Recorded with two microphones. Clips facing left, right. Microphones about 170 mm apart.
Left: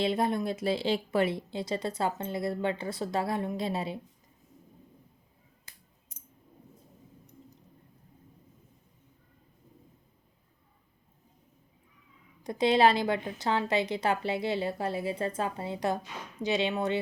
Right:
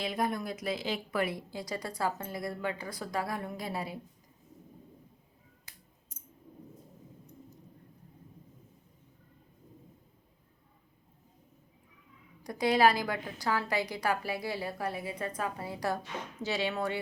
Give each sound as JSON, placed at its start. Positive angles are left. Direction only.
{"t": 0.0, "sound": "speech", "side_deg": 25}
{"t": 6.1, "sound": "a sound", "side_deg": 65}
{"t": 12.4, "sound": "speech", "side_deg": 25}